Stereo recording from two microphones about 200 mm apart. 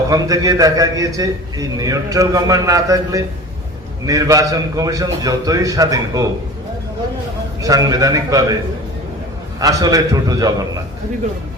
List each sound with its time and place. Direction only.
0.1 s a man's voice: 15° right (ahead or behind)
7.6 s a man's voice: 15° right (ahead or behind)
9.6 s a man's voice: 20° right (ahead or behind)